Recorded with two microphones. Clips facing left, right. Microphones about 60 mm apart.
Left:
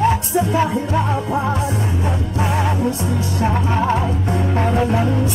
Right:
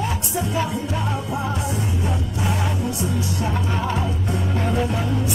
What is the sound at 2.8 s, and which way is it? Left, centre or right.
Music, left.